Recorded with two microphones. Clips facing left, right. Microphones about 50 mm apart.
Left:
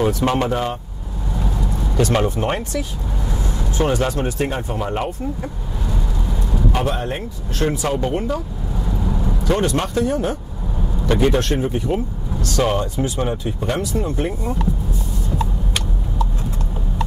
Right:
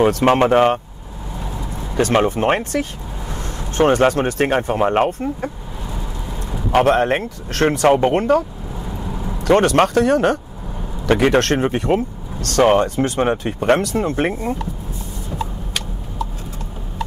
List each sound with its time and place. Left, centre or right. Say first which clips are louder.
0.2 s speech: right 6 dB; right
2.0 s speech: right 3 dB; right
6.7 s speech: right 11 dB; right